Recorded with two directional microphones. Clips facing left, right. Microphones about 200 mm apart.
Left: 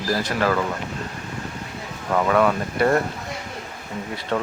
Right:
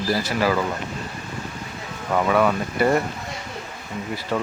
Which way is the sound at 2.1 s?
5° right (ahead or behind).